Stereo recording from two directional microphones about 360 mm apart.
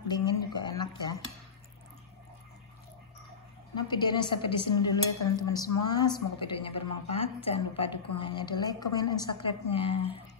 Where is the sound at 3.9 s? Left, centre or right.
Centre.